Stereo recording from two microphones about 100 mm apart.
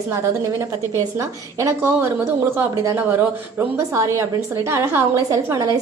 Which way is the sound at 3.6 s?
25° right (ahead or behind).